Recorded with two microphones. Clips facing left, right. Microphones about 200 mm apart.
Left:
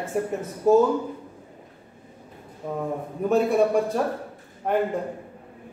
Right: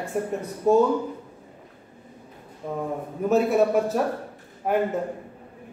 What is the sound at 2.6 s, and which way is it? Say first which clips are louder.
A man's voice: even; centre (ahead or behind).